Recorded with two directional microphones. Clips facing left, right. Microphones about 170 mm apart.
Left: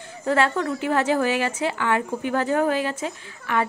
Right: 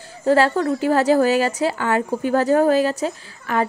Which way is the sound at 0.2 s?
30° right (ahead or behind).